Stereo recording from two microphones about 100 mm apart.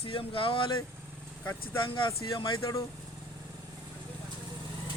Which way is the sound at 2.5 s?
30° left (ahead or behind).